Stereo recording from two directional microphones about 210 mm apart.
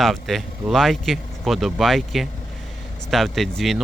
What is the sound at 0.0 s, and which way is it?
Speech, centre (ahead or behind).